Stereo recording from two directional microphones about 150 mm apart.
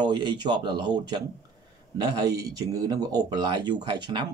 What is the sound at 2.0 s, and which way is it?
Speech, 25° right (ahead or behind).